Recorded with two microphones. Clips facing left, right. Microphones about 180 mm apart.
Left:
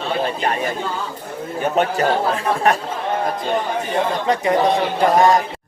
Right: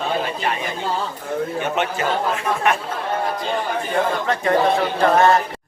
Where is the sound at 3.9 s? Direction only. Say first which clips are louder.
Left 2 dB; 15° left (ahead or behind).